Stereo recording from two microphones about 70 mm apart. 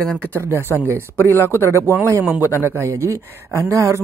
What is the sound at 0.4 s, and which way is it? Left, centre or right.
Speech, right.